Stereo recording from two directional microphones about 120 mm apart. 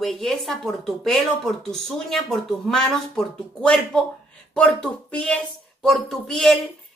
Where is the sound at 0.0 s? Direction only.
5° left (ahead or behind).